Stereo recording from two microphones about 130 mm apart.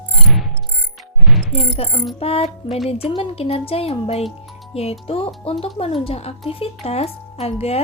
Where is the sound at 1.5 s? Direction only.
45° left (ahead or behind).